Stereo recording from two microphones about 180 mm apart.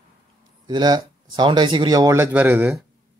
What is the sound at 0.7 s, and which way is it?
Speech, 25° right (ahead or behind).